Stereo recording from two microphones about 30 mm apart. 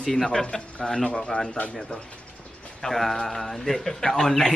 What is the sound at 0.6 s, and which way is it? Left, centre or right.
Speech, left.